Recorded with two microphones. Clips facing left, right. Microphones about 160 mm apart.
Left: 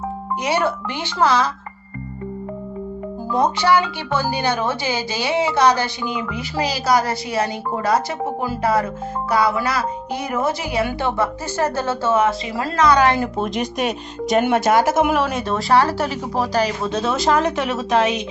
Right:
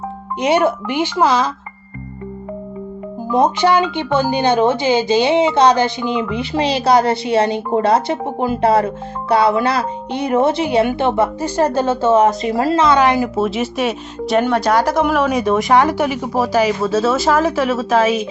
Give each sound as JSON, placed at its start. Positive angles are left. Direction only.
{"t": 0.4, "sound": "speech", "side_deg": -20}
{"t": 3.2, "sound": "speech", "side_deg": -20}
{"t": 12.1, "sound": "speech", "side_deg": -35}
{"t": 13.1, "sound": "speech", "side_deg": -5}
{"t": 15.5, "sound": "speech", "side_deg": -15}